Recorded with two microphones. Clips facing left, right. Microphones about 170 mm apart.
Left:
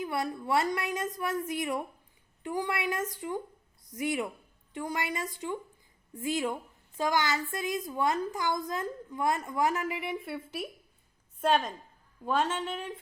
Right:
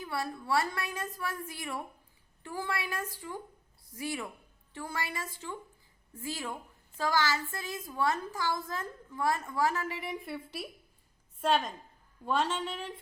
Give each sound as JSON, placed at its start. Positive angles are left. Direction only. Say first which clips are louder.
{"t": 0.0, "sound": "a woman's voice", "louder": "left 4 dB", "side_deg": 20}
{"t": 12.2, "sound": "a woman's voice", "louder": "left 1 dB", "side_deg": 5}